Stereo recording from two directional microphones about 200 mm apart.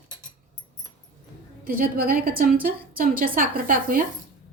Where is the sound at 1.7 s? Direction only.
45° right (ahead or behind).